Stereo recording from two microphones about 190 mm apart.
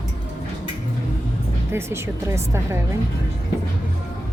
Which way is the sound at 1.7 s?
15° right (ahead or behind).